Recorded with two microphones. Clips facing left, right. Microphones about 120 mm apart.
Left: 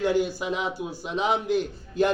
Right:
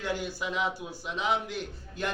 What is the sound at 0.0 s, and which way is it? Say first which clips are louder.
A man's voice: left 9 dB; 25° left (ahead or behind).